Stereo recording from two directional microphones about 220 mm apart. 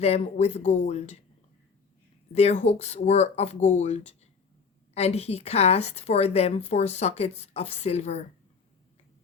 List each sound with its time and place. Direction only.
0.0 s a woman's voice: 30° left (ahead or behind)
2.3 s a woman's voice: 30° left (ahead or behind)